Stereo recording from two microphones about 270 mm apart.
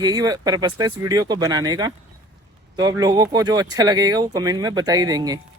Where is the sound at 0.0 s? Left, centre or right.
Centre.